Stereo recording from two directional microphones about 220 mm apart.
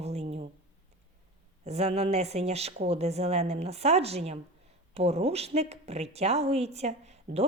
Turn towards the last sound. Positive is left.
turn(degrees=-30)  # may be behind; listen again after turning